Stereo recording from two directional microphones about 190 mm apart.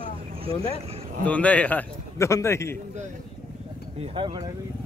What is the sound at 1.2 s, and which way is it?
A man's voice, 5° left (ahead or behind).